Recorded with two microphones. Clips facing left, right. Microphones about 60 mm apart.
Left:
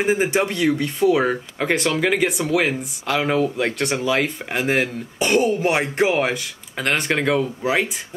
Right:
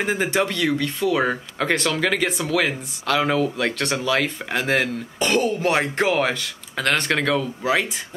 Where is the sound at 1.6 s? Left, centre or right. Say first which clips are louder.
Left 1 dB; centre.